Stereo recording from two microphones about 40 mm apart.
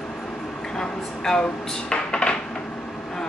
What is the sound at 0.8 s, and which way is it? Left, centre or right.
Speech, centre.